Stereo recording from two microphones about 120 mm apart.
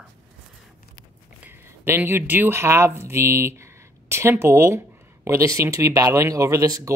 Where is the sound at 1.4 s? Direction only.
20° right (ahead or behind).